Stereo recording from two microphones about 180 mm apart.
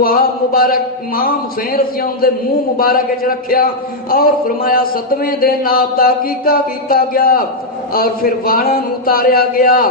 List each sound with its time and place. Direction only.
0.0 s a man's voice: 55° left (ahead or behind)